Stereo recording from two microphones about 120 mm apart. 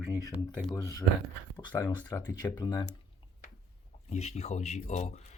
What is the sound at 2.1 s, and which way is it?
Speech, 30° left (ahead or behind).